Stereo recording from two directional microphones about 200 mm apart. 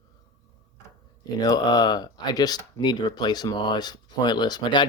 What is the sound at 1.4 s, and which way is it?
Speech, 20° left (ahead or behind).